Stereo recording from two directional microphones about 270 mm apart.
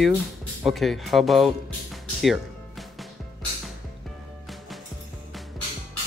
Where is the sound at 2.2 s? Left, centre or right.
Centre.